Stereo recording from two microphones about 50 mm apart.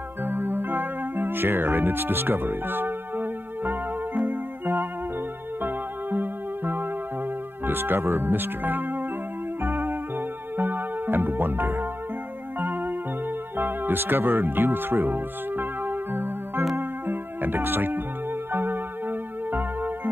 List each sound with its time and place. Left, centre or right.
0.2 s music: right
7.6 s speech: right
9.6 s music: right